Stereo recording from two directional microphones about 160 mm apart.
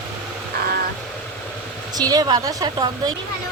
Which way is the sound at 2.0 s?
25° right (ahead or behind).